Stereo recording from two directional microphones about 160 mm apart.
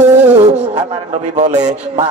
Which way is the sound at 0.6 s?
45° right (ahead or behind).